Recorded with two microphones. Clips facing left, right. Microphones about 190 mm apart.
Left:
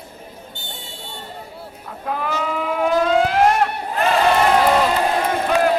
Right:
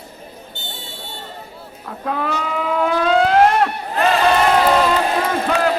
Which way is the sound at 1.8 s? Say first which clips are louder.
Right 2 dB; 55° right (ahead or behind).